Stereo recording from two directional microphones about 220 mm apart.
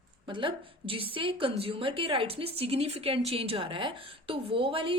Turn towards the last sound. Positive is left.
turn(degrees=-25)  # may be behind; listen again after turning